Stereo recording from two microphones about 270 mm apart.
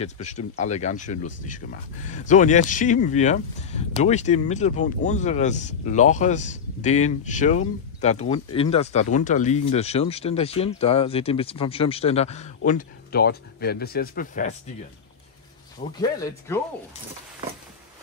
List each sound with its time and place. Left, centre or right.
0.0 s speech: left
16.0 s speech: centre